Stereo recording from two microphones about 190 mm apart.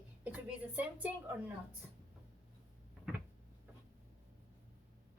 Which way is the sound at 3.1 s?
5° right (ahead or behind).